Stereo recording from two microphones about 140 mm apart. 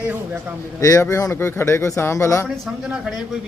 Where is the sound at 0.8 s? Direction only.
25° left (ahead or behind).